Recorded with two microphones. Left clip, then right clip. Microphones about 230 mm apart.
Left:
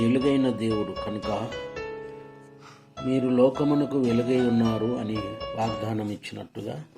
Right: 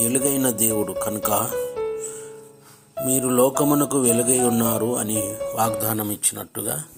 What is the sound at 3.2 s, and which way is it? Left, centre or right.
Speech, right.